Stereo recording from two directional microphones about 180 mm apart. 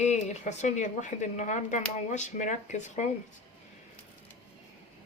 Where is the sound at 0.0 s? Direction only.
40° left (ahead or behind).